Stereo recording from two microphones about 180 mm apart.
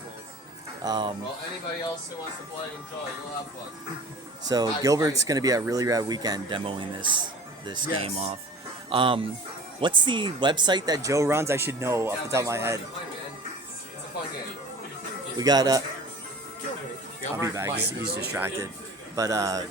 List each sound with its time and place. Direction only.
0.8 s speech: 25° right (ahead or behind)
4.4 s speech: 20° right (ahead or behind)
15.4 s speech: 20° right (ahead or behind)
17.4 s speech: 15° right (ahead or behind)
17.7 s speech: 65° right (ahead or behind)
18.3 s speech: 10° right (ahead or behind)